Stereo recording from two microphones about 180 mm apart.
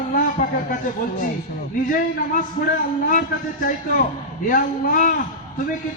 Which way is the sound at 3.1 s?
50° left (ahead or behind).